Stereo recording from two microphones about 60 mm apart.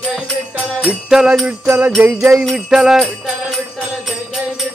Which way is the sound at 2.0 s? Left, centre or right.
Right.